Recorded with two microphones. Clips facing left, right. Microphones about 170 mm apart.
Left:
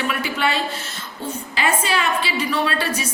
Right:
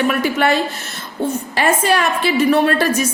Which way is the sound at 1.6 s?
50° right (ahead or behind).